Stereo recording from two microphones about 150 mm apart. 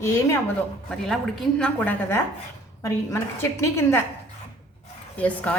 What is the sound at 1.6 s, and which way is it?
A woman's voice, 10° left (ahead or behind).